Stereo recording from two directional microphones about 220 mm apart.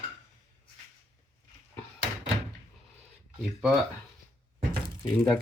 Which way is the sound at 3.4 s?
Centre (ahead or behind).